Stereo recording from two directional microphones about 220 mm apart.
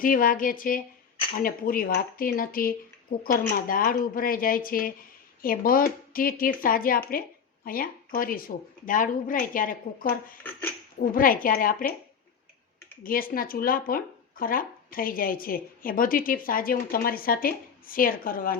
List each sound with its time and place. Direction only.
0.0 s speech: 40° left (ahead or behind)
13.0 s speech: 40° left (ahead or behind)